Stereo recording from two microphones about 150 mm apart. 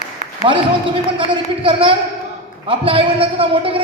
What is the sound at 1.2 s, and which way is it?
A man's voice, 35° right (ahead or behind).